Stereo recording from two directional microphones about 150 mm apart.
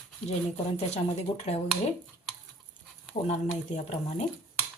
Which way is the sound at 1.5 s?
45° left (ahead or behind).